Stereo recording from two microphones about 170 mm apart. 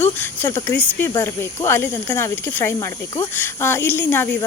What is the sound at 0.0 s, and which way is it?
Speech, 15° left (ahead or behind).